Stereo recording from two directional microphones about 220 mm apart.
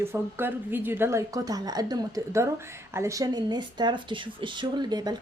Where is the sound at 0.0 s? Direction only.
10° right (ahead or behind).